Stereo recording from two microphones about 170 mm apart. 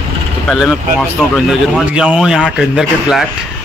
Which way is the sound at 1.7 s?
5° right (ahead or behind).